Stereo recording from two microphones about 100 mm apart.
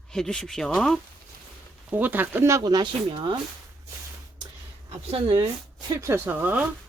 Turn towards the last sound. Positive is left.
turn(degrees=-20)  # may be behind; listen again after turning